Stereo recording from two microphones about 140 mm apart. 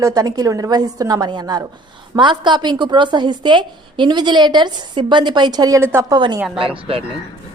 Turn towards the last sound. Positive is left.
turn(degrees=-40)  # may be behind; listen again after turning